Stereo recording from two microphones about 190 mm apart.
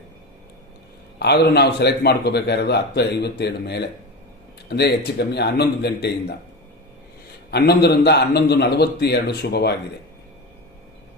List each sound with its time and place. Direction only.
1.2 s a man's voice: 60° left (ahead or behind)
7.5 s a man's voice: 60° left (ahead or behind)